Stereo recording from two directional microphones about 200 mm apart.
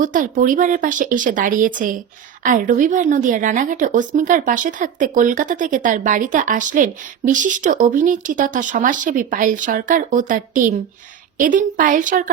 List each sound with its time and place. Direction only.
0.0 s a woman's voice: 40° right (ahead or behind)